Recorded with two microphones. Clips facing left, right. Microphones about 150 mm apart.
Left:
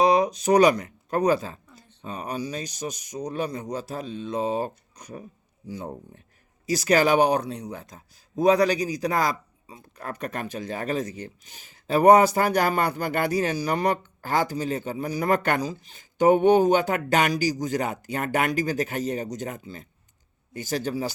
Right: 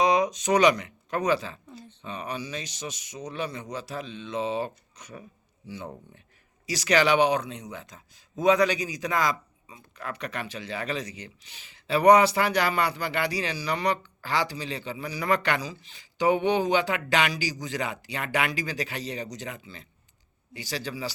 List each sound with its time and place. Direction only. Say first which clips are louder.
0.2 s speech: left 3 dB; 35° left (ahead or behind)